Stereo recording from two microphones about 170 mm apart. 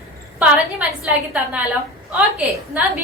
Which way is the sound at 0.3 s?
5° right (ahead or behind).